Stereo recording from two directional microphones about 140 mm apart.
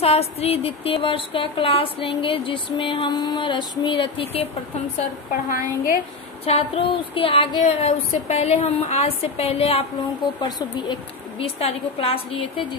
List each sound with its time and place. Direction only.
0.0 s a sound: 45° left (ahead or behind)
5.3 s a woman's voice: 75° left (ahead or behind)
6.4 s speech: 45° left (ahead or behind)